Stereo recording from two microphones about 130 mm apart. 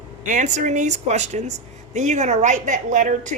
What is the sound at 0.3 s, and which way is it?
Speech, 70° right (ahead or behind).